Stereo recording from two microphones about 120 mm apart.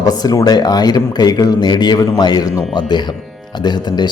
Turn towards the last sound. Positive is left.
turn(degrees=35)  # may be behind; listen again after turning